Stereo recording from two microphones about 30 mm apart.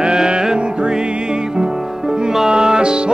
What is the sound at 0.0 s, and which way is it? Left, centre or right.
Music, right.